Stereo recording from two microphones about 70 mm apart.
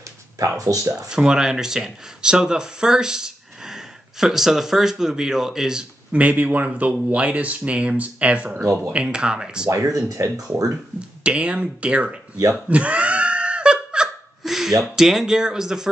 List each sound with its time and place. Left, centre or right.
0.6 s speech: right
1.0 s speech: centre
6.1 s speech: right
9.9 s speech: right
11.0 s speech: centre
12.6 s laughter: centre
14.0 s hiccup: centre
14.8 s speech: centre